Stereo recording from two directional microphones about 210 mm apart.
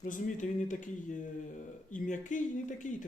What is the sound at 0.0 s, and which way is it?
Speech, 35° left (ahead or behind).